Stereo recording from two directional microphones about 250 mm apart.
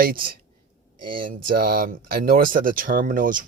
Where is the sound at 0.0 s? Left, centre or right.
Right.